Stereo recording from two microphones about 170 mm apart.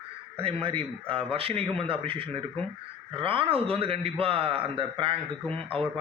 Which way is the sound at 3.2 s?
30° right (ahead or behind).